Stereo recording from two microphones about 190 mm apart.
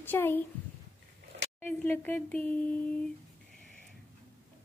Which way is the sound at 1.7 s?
5° left (ahead or behind).